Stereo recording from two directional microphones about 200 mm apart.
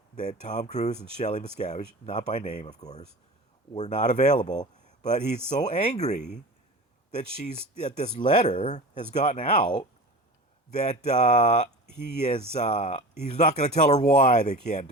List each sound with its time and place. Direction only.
0.2 s speech: 35° left (ahead or behind)
3.8 s speech: 35° left (ahead or behind)
10.7 s speech: 35° left (ahead or behind)